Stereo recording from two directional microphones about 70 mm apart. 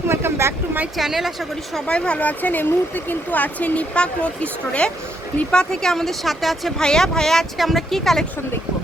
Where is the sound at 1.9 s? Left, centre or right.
Centre.